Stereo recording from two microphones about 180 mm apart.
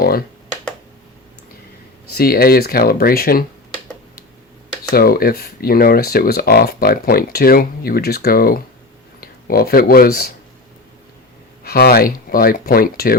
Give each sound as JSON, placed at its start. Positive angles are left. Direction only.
{"t": 0.0, "sound": "computer keyboard", "side_deg": 55}
{"t": 2.1, "sound": "speech", "side_deg": 55}
{"t": 4.9, "sound": "speech", "side_deg": 55}
{"t": 11.6, "sound": "speech", "side_deg": 60}